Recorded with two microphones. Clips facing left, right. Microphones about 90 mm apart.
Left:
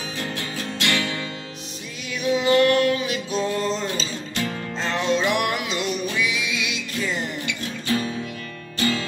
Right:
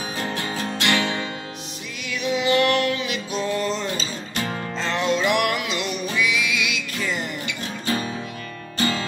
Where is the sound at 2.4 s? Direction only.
35° left (ahead or behind).